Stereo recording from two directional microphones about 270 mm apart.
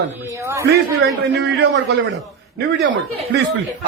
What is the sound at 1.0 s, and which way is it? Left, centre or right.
A man's voice, right.